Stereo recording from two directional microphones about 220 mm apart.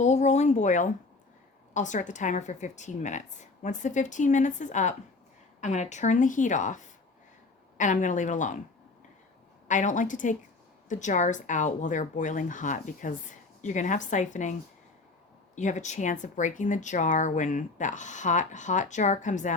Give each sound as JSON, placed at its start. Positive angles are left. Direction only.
{"t": 0.0, "sound": "speech", "side_deg": 30}
{"t": 9.6, "sound": "speech", "side_deg": 35}
{"t": 15.5, "sound": "speech", "side_deg": 35}